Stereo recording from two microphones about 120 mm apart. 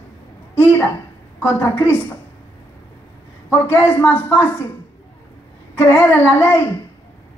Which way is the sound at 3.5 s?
20° left (ahead or behind).